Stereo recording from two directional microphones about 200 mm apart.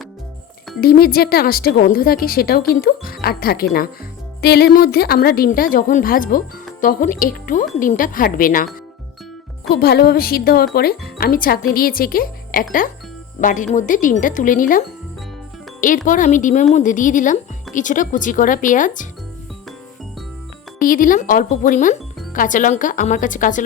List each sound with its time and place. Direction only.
0.8 s speech: 50° left (ahead or behind)
9.6 s speech: 55° left (ahead or behind)
20.7 s speech: 45° left (ahead or behind)